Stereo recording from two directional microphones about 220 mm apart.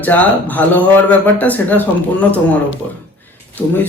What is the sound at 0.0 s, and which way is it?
Speech, 5° left (ahead or behind).